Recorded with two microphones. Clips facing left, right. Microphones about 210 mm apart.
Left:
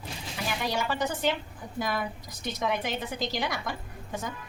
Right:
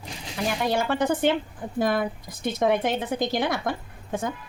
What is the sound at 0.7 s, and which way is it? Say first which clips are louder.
A woman's voice: right 7 dB; 50° right (ahead or behind).